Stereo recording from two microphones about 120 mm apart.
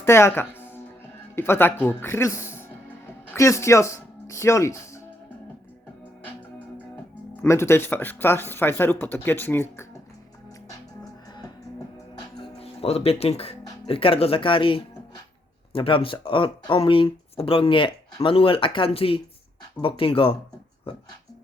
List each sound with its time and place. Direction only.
0.0 s music: 20° left (ahead or behind)
1.4 s speech: 20° left (ahead or behind)
7.4 s speech: 20° left (ahead or behind)
12.5 s speech: 55° left (ahead or behind)